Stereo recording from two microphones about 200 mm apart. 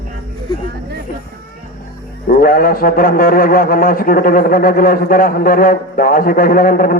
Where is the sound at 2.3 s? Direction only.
45° left (ahead or behind).